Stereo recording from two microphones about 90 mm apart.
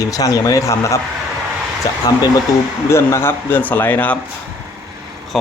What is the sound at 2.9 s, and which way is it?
Speech, 30° left (ahead or behind).